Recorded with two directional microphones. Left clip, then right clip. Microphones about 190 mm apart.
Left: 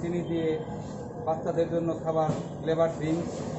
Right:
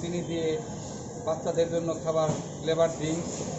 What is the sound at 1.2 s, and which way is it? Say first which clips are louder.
A man's voice: right 1 dB; centre (ahead or behind).